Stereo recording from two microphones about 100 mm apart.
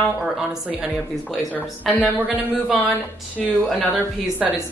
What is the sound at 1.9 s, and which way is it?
Speech, 20° left (ahead or behind).